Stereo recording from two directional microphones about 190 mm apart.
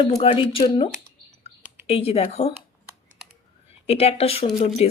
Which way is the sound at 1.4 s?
30° left (ahead or behind).